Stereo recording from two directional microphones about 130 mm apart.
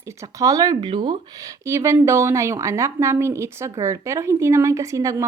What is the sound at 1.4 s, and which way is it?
A woman's voice, 25° right (ahead or behind).